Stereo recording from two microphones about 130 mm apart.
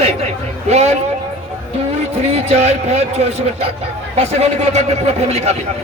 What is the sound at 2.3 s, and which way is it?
A man's voice, 50° right (ahead or behind).